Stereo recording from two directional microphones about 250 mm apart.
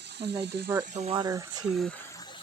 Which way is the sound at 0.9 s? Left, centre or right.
Right.